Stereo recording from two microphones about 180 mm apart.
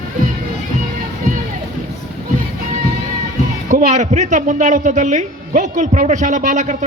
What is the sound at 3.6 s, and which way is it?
A man's voice, 45° right (ahead or behind).